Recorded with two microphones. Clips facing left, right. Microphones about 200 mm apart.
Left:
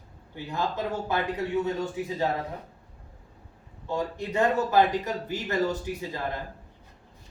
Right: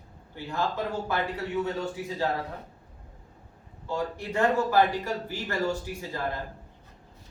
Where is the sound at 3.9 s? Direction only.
20° left (ahead or behind).